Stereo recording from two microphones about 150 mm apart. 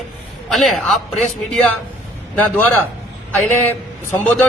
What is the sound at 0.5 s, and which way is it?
Speech, centre (ahead or behind).